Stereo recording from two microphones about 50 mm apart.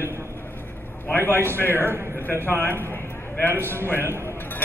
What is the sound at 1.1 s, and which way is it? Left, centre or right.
Speech, left.